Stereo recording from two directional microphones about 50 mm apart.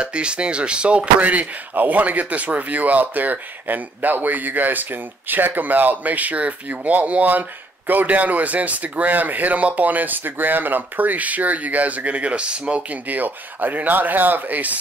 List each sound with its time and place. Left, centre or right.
0.0 s speech: right